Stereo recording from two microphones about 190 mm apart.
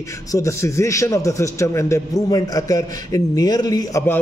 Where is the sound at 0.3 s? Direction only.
15° left (ahead or behind).